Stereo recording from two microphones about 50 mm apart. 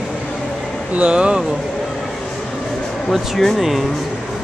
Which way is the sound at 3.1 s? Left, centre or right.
Centre.